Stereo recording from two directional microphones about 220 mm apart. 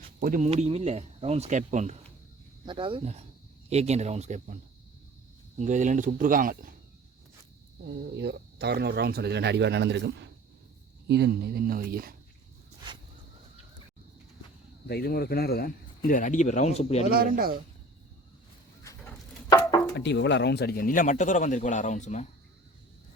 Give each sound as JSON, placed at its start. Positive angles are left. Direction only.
{"t": 0.2, "sound": "speech", "side_deg": -35}
{"t": 5.5, "sound": "speech", "side_deg": -35}
{"t": 7.9, "sound": "speech", "side_deg": -50}
{"t": 14.8, "sound": "speech", "side_deg": 45}
{"t": 17.1, "sound": "speech", "side_deg": -40}
{"t": 19.5, "sound": "a sound", "side_deg": 15}
{"t": 20.0, "sound": "speech", "side_deg": 50}